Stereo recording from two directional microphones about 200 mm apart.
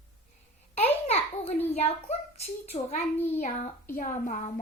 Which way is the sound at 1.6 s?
30° left (ahead or behind).